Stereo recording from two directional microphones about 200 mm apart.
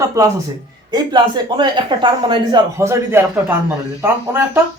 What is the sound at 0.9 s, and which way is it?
Speech, 20° right (ahead or behind).